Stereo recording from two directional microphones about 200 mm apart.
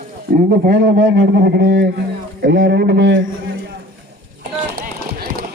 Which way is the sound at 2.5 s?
50° right (ahead or behind).